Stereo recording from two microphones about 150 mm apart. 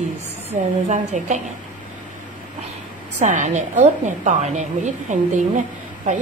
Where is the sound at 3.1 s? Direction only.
55° right (ahead or behind).